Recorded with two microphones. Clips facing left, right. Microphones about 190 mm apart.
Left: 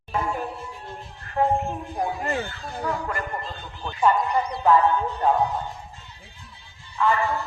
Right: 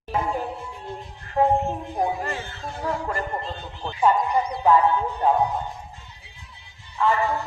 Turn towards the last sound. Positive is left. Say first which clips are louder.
# right 1 dB
turn(degrees=-20)  # may be behind; listen again after turning